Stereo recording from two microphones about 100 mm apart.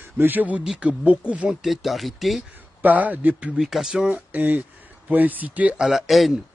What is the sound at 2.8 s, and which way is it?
Speech, 15° right (ahead or behind).